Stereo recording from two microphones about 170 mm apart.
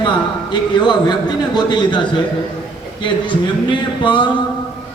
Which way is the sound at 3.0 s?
30° left (ahead or behind).